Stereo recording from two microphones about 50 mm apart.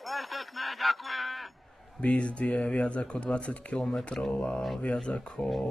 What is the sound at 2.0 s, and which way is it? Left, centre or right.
Speech, left.